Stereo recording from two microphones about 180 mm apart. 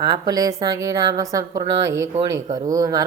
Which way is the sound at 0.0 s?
25° right (ahead or behind).